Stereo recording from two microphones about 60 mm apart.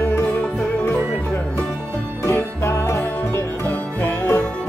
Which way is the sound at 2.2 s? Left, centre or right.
Left.